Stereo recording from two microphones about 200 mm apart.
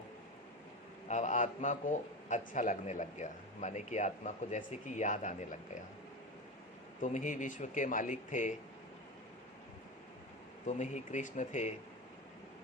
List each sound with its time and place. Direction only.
1.0 s a man's voice: 35° left (ahead or behind)
7.0 s a man's voice: 40° left (ahead or behind)
10.7 s a man's voice: 35° left (ahead or behind)